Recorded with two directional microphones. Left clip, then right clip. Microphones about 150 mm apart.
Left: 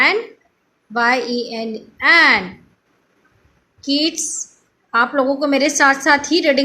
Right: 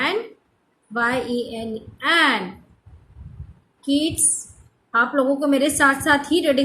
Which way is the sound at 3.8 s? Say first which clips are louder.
Left 3 dB; 20° left (ahead or behind).